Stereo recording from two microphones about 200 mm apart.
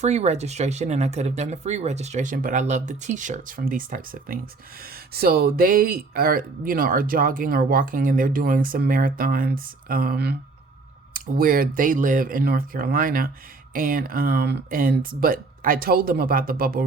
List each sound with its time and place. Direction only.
0.0 s speech: 35° right (ahead or behind)